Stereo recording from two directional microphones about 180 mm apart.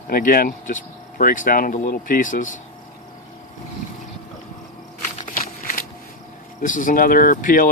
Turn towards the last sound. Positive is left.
turn(degrees=50)  # may be behind; listen again after turning